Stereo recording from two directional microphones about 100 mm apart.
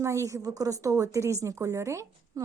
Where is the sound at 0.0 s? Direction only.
30° right (ahead or behind).